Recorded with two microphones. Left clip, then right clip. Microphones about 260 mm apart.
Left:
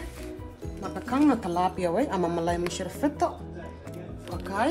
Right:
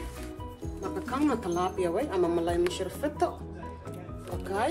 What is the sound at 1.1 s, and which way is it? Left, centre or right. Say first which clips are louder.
Speech: left 5 dB; left.